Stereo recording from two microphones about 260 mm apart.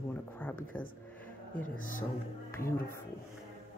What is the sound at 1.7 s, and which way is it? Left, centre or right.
Speech, left.